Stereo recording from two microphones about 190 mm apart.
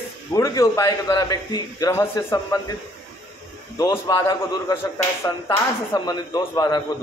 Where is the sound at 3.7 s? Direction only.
15° left (ahead or behind).